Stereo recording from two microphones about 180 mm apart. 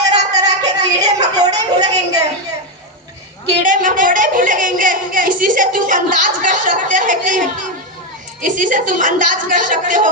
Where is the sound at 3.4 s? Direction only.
45° right (ahead or behind).